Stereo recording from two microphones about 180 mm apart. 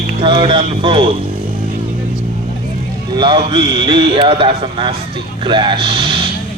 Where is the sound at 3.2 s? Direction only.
30° right (ahead or behind).